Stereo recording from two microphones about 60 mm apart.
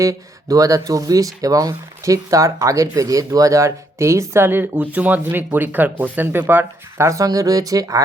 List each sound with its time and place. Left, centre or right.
0.0 s speech: right
4.4 s speech: right
4.9 s speech: right
7.0 s speech: right